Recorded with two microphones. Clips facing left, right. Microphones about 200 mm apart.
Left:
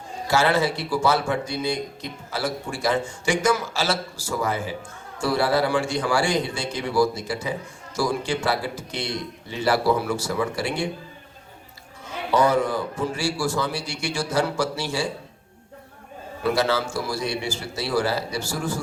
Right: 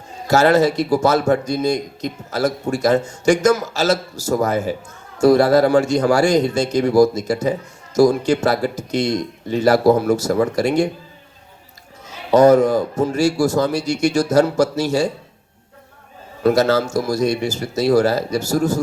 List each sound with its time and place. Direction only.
0.3 s a man's voice: 40° right (ahead or behind)
12.0 s a man's voice: 40° right (ahead or behind)
16.4 s a man's voice: 40° right (ahead or behind)